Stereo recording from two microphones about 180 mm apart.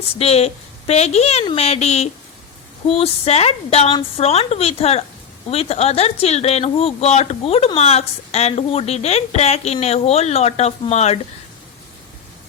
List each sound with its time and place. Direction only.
0.2 s speech: 35° left (ahead or behind)